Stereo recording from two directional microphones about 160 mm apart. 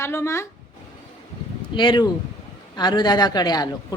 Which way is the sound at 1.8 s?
30° left (ahead or behind).